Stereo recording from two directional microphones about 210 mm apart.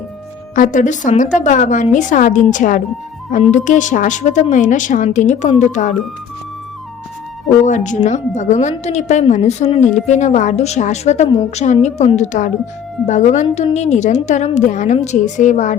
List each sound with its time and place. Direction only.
0.5 s a woman's voice: 40° left (ahead or behind)
7.6 s a woman's voice: 35° left (ahead or behind)